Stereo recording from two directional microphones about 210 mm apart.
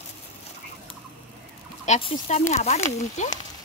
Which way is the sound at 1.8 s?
30° left (ahead or behind).